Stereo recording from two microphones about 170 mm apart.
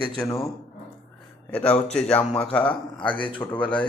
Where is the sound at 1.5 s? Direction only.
10° left (ahead or behind).